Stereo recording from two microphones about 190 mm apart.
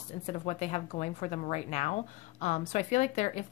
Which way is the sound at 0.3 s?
35° left (ahead or behind).